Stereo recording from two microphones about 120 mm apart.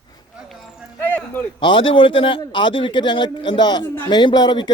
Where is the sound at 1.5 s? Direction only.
45° left (ahead or behind).